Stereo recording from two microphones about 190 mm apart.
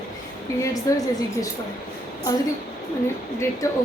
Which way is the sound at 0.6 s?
15° left (ahead or behind).